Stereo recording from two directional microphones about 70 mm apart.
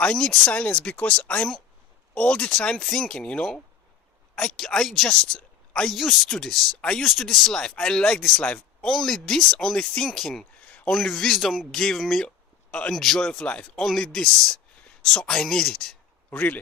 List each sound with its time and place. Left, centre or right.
0.0 s speech: centre
4.5 s speech: centre
10.7 s a sound: centre
11.0 s speech: centre
11.3 s speech: centre
16.3 s a man's voice: left